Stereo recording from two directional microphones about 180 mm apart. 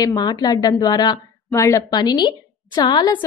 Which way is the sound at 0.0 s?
20° left (ahead or behind).